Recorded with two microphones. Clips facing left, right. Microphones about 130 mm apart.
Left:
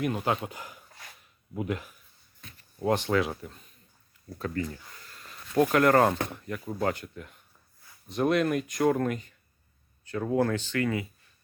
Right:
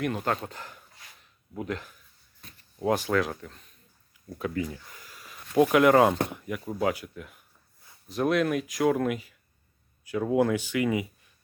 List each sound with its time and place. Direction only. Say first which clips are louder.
0.0 s speech: even; 5° left (ahead or behind)
2.7 s speech: even; 5° right (ahead or behind)
4.3 s speech: right 2 dB; 10° right (ahead or behind)